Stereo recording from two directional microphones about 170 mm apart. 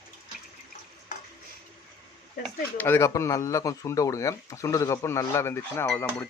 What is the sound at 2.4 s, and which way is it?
Speech, 10° left (ahead or behind).